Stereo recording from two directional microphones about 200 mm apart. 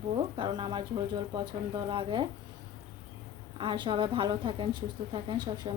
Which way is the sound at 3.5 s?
25° right (ahead or behind).